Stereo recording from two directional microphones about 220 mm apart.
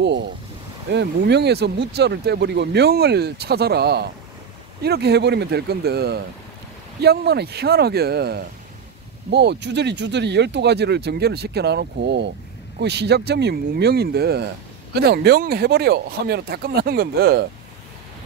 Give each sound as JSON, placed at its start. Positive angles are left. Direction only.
{"t": 0.0, "sound": "speech", "side_deg": -50}